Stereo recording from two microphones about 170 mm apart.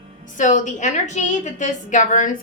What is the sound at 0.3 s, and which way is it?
A woman's voice, 45° left (ahead or behind).